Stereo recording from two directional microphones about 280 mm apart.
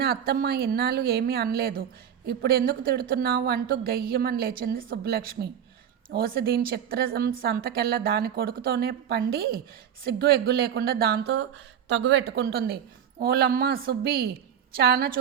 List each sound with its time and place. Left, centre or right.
0.0 s a woman's voice: right